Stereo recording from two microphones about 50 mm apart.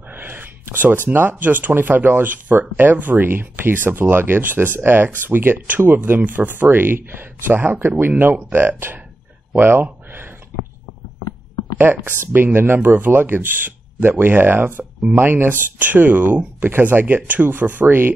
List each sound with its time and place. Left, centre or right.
0.1 s speech: right
11.8 s speech: right